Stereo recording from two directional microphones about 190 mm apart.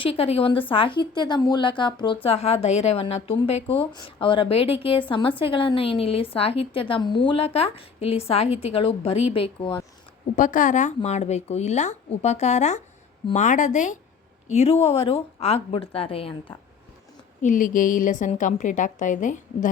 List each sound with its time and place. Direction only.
0.0 s a woman's voice: 30° left (ahead or behind)
10.3 s a woman's voice: 45° left (ahead or behind)
17.4 s a woman's voice: 45° left (ahead or behind)